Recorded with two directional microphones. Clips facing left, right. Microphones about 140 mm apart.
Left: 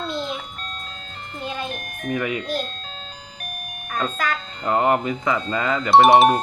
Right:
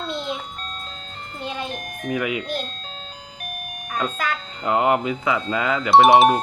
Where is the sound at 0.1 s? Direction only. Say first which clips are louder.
Right 2 dB; 25° right (ahead or behind).